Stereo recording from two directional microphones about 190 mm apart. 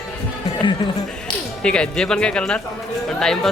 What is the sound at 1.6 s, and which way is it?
A man's voice, 5° left (ahead or behind).